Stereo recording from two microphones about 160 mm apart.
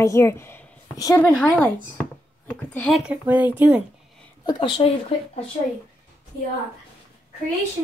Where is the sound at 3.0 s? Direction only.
10° right (ahead or behind).